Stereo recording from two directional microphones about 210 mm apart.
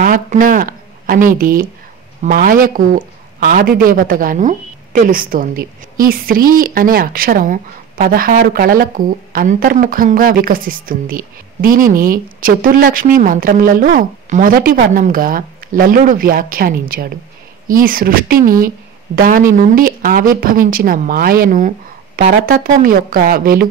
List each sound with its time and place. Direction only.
0.0 s speech: 40° right (ahead or behind)